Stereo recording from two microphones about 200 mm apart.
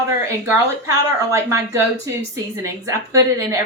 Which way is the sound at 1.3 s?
15° right (ahead or behind).